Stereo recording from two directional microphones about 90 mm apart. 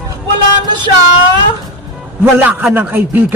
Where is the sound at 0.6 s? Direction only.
55° right (ahead or behind).